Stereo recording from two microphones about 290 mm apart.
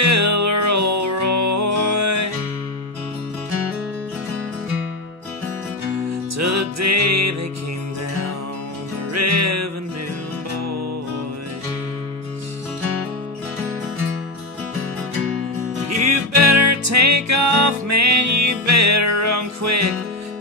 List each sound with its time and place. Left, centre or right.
0.0 s music: right
6.3 s music: right
9.1 s music: right
16.0 s music: right